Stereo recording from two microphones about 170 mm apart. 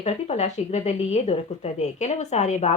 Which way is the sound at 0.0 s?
40° left (ahead or behind).